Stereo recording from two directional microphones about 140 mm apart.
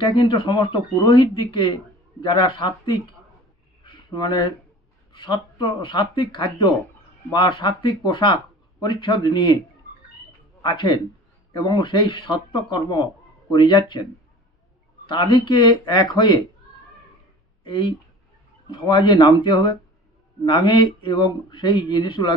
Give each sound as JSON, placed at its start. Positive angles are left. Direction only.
{"t": 0.0, "sound": "speech", "side_deg": 35}
{"t": 3.8, "sound": "a sound", "side_deg": 35}
{"t": 5.1, "sound": "speech", "side_deg": 30}
{"t": 10.6, "sound": "speech", "side_deg": 30}
{"t": 15.0, "sound": "speech", "side_deg": 30}
{"t": 17.6, "sound": "speech", "side_deg": 35}